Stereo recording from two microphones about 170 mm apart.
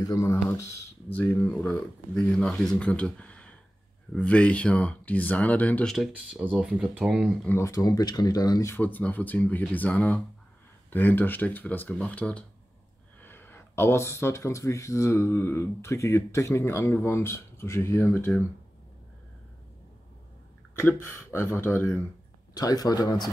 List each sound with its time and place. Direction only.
0.0 s speech: 20° left (ahead or behind); by 7.2 s 5° right (ahead or behind)
7.4 s speech: 15° left (ahead or behind)
20.7 s speech: 15° left (ahead or behind)